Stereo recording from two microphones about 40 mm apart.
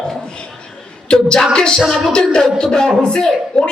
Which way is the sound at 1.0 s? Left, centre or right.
Left.